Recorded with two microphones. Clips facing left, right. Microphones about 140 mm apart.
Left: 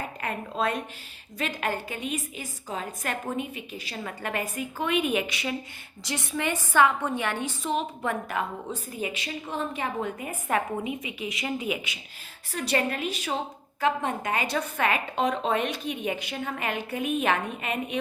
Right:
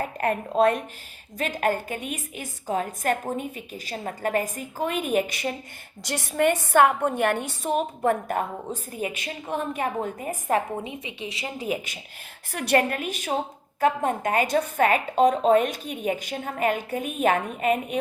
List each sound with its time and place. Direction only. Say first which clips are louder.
0.2 s a woman's voice: right 9 dB; 50° right (ahead or behind)
6.1 s a woman's voice: right 7 dB; 60° right (ahead or behind); by 11.9 s 35° right (ahead or behind)
12.5 s a woman's voice: right 4 dB; 55° right (ahead or behind)